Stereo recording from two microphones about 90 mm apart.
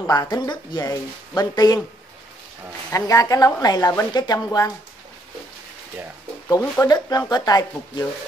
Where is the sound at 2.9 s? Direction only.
40° left (ahead or behind).